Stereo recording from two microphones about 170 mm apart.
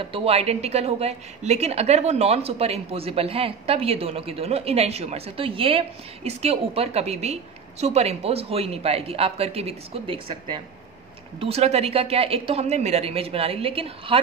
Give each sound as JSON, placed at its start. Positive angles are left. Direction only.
{"t": 0.0, "sound": "a woman's voice", "side_deg": -35}